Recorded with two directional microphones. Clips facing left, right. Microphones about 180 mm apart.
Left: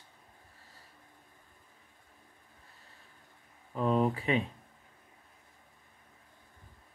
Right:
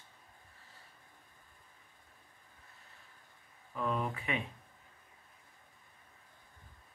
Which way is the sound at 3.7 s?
30° left (ahead or behind).